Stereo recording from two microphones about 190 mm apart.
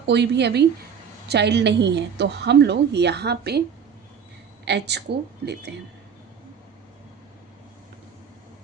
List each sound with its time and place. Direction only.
0.1 s a woman's voice: 65° right (ahead or behind)
4.6 s a woman's voice: 65° right (ahead or behind)